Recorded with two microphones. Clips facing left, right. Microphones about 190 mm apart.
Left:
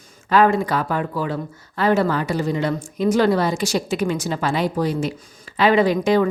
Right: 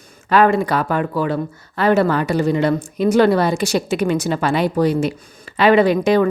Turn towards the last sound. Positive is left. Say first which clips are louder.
# right 3 dB
turn(degrees=-65)  # may be behind; listen again after turning